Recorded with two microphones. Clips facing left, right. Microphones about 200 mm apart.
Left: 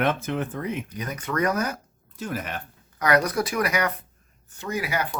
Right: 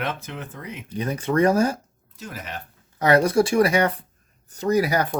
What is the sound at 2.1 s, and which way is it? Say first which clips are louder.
Speech: left 5 dB; 50° left (ahead or behind).